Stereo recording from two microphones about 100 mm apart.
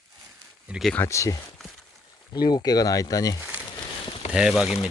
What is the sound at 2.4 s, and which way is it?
Speech, 45° left (ahead or behind).